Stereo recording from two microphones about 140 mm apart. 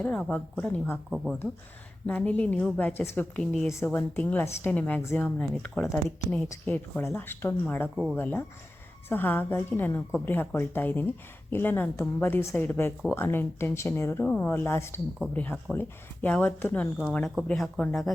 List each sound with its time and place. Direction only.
0.0 s a woman's voice: 10° left (ahead or behind)
2.0 s a woman's voice: 10° left (ahead or behind)
3.7 s a woman's voice: 20° left (ahead or behind); by 17.8 s 5° left (ahead or behind)